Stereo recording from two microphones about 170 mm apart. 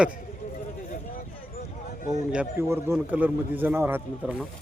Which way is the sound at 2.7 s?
10° right (ahead or behind).